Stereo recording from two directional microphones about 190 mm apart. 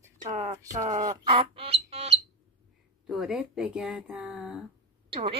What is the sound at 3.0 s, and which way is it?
Speech, 5° right (ahead or behind).